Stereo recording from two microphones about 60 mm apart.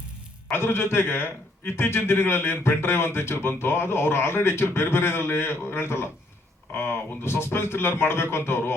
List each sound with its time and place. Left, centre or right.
0.5 s a man's voice: left